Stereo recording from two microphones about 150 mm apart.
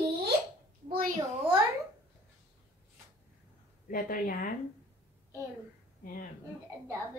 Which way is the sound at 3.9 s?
70° left (ahead or behind).